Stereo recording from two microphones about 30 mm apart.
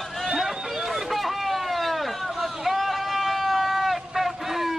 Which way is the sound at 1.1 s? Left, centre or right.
Centre.